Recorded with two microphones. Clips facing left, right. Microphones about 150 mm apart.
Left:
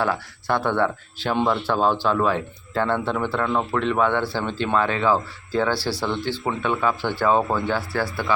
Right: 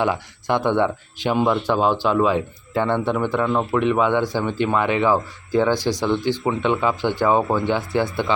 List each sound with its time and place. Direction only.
0.0 s speech: 15° right (ahead or behind)